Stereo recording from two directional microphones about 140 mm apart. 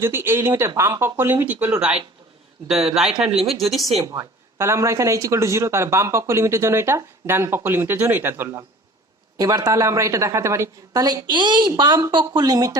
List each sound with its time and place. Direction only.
0.0 s speech: 15° right (ahead or behind); by 3.9 s centre (ahead or behind)
4.0 s speech: 20° right (ahead or behind)